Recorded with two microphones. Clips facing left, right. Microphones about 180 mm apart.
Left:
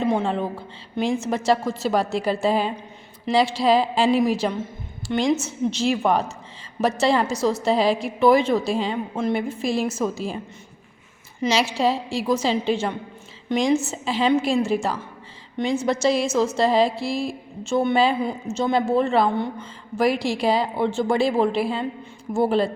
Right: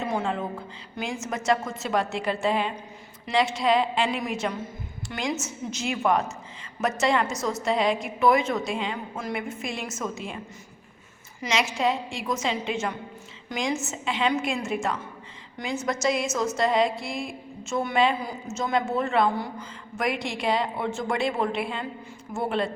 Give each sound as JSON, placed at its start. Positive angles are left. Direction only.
{"t": 0.1, "sound": "a woman's voice", "side_deg": 30}
{"t": 11.4, "sound": "speech", "side_deg": 30}